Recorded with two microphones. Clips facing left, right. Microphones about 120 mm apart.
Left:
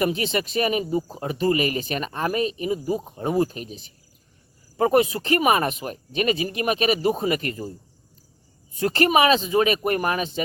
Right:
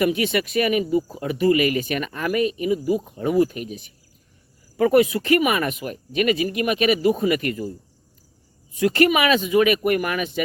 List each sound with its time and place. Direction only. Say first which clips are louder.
0.0 s speech: right 3 dB; 30° left (ahead or behind)
8.8 s speech: right 1 dB; 35° left (ahead or behind)